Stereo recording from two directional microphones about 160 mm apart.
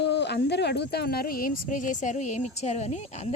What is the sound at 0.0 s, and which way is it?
Speech, 90° left.